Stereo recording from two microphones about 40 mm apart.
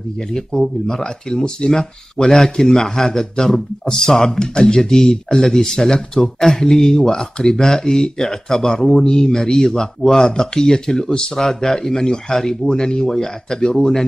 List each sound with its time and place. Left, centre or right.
0.2 s speech: centre